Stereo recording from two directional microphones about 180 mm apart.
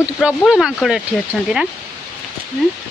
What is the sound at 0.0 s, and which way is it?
Speech, 5° right (ahead or behind).